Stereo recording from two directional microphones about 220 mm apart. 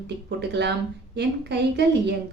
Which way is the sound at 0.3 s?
50° right (ahead or behind).